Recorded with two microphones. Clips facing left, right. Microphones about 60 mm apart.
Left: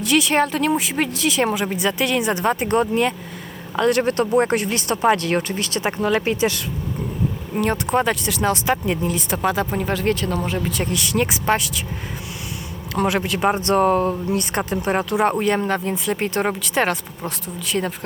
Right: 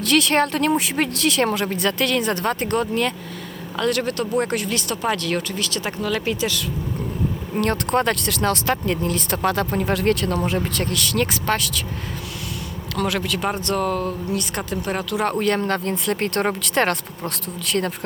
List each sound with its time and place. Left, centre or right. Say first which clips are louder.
0.0 s speech: even; centre; by 6.6 s left
7.5 s speech: left 1 dB; centre
10.8 s speech: left 1 dB; centre
13.0 s speech: left 3 dB; left; by 17.9 s centre